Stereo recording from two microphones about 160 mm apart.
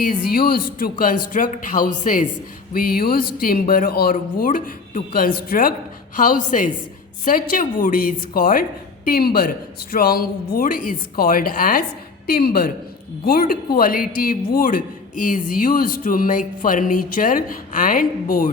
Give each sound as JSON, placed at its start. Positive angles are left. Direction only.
{"t": 0.3, "sound": "a woman's voice", "side_deg": 65}
{"t": 1.8, "sound": "a woman's voice", "side_deg": 65}